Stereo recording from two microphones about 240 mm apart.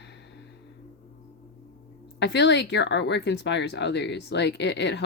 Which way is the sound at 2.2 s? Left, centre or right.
Left.